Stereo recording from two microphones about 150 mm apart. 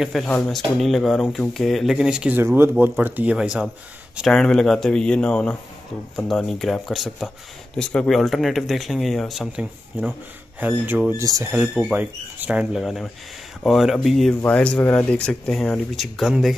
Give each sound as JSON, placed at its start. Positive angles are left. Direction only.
{"t": 0.0, "sound": "speech", "side_deg": 5}
{"t": 4.3, "sound": "speech", "side_deg": 5}
{"t": 11.5, "sound": "speech", "side_deg": 0}